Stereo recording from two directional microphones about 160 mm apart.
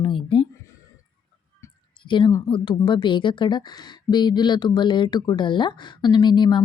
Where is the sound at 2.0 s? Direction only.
30° left (ahead or behind).